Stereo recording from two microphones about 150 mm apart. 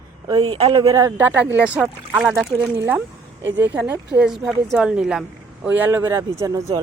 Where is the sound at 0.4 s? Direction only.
35° right (ahead or behind).